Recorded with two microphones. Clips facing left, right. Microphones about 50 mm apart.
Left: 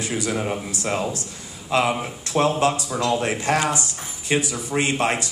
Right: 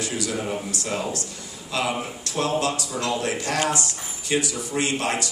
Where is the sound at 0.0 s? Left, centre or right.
Left.